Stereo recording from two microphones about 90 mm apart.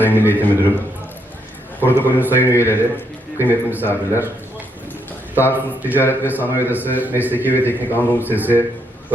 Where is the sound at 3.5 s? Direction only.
20° right (ahead or behind).